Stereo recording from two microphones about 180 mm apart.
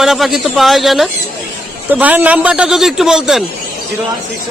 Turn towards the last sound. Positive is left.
turn(degrees=-5)  # may be behind; listen again after turning